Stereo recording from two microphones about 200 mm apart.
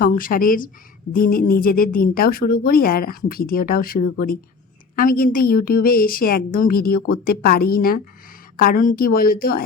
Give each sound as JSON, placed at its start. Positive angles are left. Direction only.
{"t": 0.0, "sound": "a woman's voice", "side_deg": 45}